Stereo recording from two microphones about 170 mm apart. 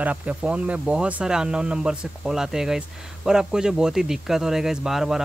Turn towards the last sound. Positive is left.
turn(degrees=0)  # may be behind; listen again after turning